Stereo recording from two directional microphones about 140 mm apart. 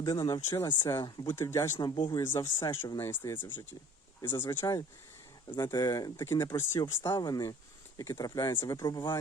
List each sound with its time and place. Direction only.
0.0 s speech: 20° left (ahead or behind)
1.0 s speech: 30° left (ahead or behind)
1.4 s speech: 20° left (ahead or behind)
1.8 s speech: 30° left (ahead or behind)
2.2 s speech: 20° left (ahead or behind)
4.4 s speech: 25° left (ahead or behind)